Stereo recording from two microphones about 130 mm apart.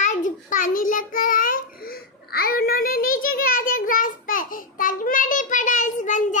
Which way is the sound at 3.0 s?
90° left.